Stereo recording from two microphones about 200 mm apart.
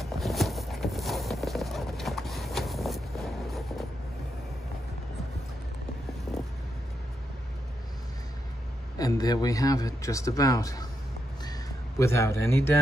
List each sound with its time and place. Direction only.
0.0 s clip-clop: centre (ahead or behind)
8.9 s a man's voice: 20° left (ahead or behind)
12.0 s a man's voice: 15° left (ahead or behind)